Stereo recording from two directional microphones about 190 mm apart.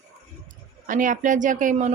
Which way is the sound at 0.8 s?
45° right (ahead or behind).